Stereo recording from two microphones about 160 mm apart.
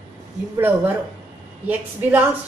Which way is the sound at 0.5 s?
15° right (ahead or behind).